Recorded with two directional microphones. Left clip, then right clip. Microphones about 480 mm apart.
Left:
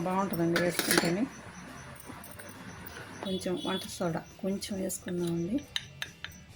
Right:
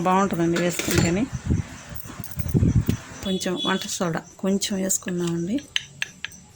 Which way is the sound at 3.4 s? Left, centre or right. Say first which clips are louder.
Right 9 dB; left.